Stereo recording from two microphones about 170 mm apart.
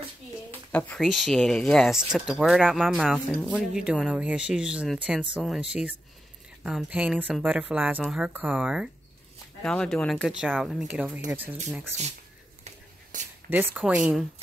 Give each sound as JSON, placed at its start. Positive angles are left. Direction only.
{"t": 0.7, "sound": "speech", "side_deg": 10}
{"t": 12.6, "sound": "a sound", "side_deg": -45}
{"t": 13.5, "sound": "speech", "side_deg": -10}